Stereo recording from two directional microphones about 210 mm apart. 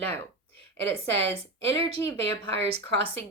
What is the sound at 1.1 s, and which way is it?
A woman's voice, 30° right (ahead or behind).